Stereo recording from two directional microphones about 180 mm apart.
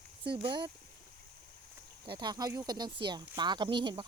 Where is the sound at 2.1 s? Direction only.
25° right (ahead or behind).